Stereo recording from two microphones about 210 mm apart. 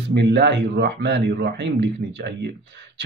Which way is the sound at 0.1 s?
55° right (ahead or behind).